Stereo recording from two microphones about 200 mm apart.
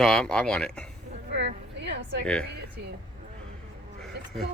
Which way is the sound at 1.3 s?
60° right (ahead or behind).